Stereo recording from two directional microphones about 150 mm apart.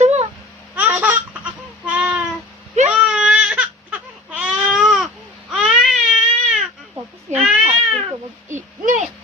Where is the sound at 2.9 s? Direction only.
5° right (ahead or behind).